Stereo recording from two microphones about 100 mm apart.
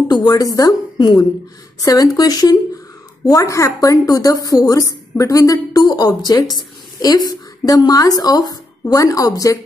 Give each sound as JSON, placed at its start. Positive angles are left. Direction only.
{"t": 0.1, "sound": "speech", "side_deg": 40}